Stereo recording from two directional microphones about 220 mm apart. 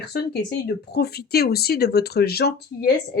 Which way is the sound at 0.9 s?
45° left (ahead or behind).